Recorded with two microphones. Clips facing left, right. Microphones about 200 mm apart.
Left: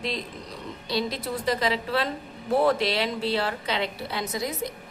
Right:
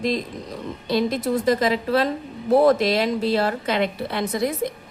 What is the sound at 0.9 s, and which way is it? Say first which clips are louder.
Speech: right 7 dB; 50° right (ahead or behind).